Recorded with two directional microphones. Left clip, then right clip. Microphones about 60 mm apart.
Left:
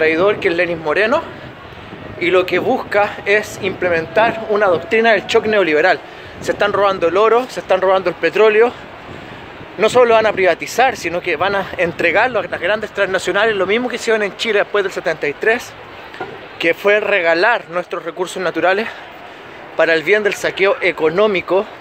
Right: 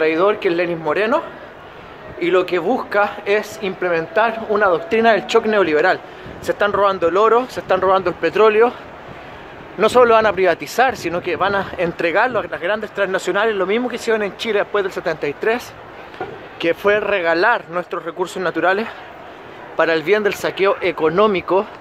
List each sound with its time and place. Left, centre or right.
0.0 s a man's voice: right
0.7 s speech: right
4.3 s a man's voice: right
5.7 s speech: right
6.4 s speech: centre; by 8.5 s right
8.5 s speech: right
9.8 s speech: right
11.2 s speech: right
12.4 s speech: centre
14.7 s speech: centre
15.1 s a man's voice: right
16.8 s speech: right
19.8 s a man's voice: right
21.3 s a man's voice: right